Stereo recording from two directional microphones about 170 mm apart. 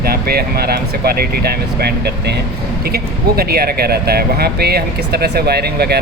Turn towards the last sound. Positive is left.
turn(degrees=-70)  # may be behind; listen again after turning